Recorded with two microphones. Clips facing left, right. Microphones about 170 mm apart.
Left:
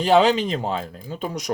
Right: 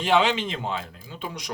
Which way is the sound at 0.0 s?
40° left (ahead or behind).